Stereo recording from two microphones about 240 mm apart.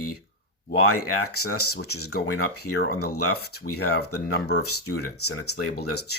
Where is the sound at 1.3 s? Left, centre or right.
Left.